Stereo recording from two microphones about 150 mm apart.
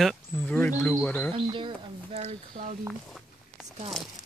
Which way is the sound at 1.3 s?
35° right (ahead or behind).